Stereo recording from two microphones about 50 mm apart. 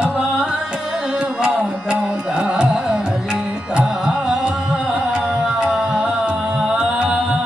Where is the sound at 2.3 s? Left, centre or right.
Right.